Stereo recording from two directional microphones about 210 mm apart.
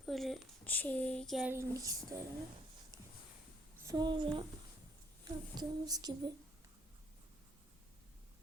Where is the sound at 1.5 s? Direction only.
15° right (ahead or behind).